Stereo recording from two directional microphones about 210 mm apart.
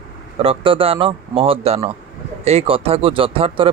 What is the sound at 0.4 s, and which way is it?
Speech, 25° right (ahead or behind).